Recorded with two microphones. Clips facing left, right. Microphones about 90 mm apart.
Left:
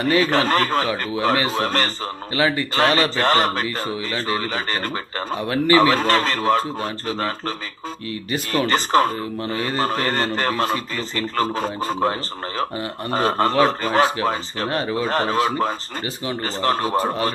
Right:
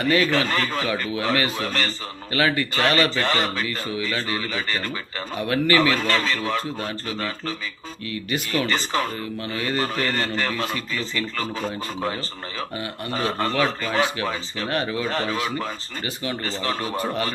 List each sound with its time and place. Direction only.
0.3 s speech: 45° left (ahead or behind)
1.1 s speech: 25° left (ahead or behind)
1.6 s speech: 45° left (ahead or behind)
2.3 s speech: 25° left (ahead or behind)
3.2 s speech: 45° left (ahead or behind)
3.6 s a man's voice: 35° left (ahead or behind)
4.4 s speech: 45° left (ahead or behind)
5.3 s a man's voice: 30° left (ahead or behind); by 9.1 s 50° left (ahead or behind)
9.4 s a man's voice: 35° left (ahead or behind)
15.0 s a man's voice: 40° left (ahead or behind)